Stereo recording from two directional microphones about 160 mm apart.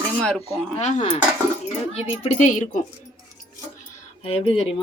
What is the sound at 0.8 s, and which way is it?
A woman's voice, 45° left (ahead or behind).